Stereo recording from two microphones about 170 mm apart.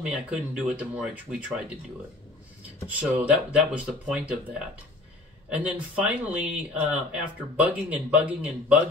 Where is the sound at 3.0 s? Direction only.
10° right (ahead or behind).